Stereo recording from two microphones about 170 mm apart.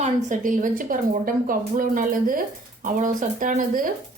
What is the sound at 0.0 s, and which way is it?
Speech, 50° right (ahead or behind).